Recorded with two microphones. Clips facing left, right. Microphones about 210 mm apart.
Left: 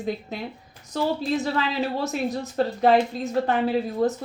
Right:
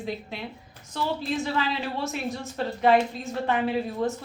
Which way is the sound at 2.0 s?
40° left (ahead or behind).